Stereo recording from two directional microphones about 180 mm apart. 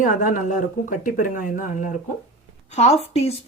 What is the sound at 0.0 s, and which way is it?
Speech, 45° left (ahead or behind).